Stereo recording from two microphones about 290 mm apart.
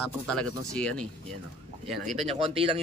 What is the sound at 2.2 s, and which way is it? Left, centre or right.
Speech, right.